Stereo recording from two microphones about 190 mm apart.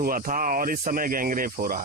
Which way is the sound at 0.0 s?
45° right (ahead or behind).